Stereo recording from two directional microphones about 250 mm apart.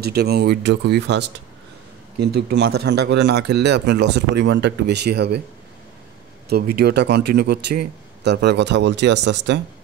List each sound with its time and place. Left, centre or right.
0.0 s a man's voice: right
6.5 s a man's voice: right